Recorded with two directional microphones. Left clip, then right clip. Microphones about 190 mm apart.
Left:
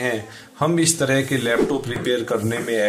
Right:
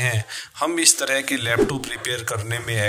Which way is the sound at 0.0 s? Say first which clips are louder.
Left 1 dB; 40° right (ahead or behind).